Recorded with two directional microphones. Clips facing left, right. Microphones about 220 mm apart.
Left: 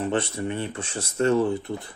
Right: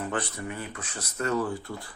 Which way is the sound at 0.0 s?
25° left (ahead or behind).